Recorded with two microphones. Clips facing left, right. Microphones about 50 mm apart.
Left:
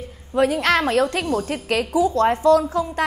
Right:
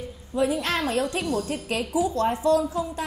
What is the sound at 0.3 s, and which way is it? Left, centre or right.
Speech, left.